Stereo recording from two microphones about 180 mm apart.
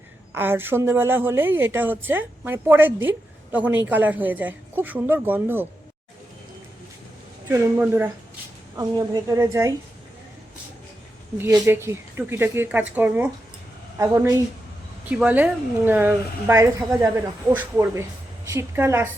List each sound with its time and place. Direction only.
0.3 s a woman's voice: 10° right (ahead or behind)
7.4 s a woman's voice: 10° right (ahead or behind)
11.3 s a woman's voice: 15° right (ahead or behind)